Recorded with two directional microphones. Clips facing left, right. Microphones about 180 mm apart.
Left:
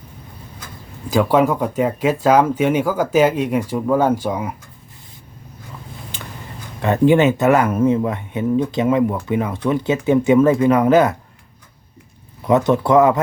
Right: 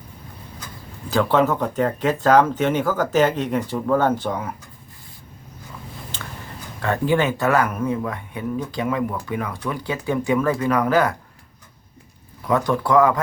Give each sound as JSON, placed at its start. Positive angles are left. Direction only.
{"t": 1.1, "sound": "speech", "side_deg": 10}
{"t": 6.8, "sound": "speech", "side_deg": 20}
{"t": 12.4, "sound": "speech", "side_deg": 20}